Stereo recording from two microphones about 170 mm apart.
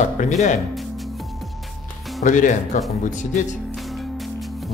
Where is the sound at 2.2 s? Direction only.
50° left (ahead or behind).